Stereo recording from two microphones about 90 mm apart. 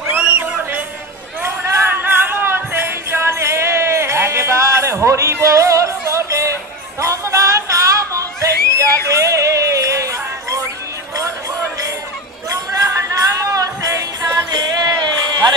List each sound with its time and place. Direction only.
0.2 s a sound: 15° right (ahead or behind)
1.4 s music: 30° right (ahead or behind)
12.4 s music: 40° right (ahead or behind)
14.5 s music: 45° right (ahead or behind)